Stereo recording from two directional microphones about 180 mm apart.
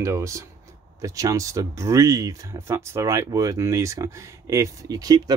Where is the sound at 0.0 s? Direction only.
15° right (ahead or behind).